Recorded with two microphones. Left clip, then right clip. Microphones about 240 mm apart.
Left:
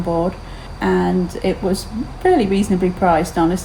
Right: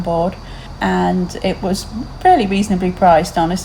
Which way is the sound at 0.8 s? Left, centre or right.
Right.